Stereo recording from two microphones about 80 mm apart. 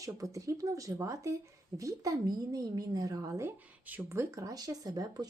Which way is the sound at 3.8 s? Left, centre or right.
Right.